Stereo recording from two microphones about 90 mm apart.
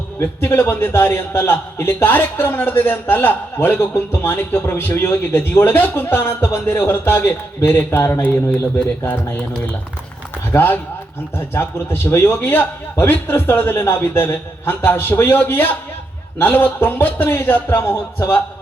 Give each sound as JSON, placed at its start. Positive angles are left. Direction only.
{"t": 0.2, "sound": "a man's voice", "side_deg": 25}
{"t": 10.5, "sound": "a man's voice", "side_deg": 20}